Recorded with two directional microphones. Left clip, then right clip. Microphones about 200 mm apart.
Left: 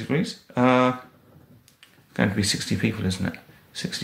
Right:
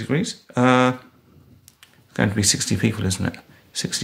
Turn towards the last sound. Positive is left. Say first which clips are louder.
# right 5 dB
turn(degrees=-35)  # may be behind; listen again after turning